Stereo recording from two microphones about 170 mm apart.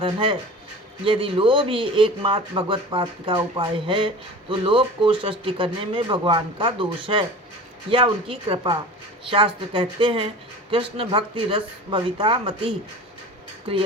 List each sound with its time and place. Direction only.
0.0 s a man's voice: 30° right (ahead or behind)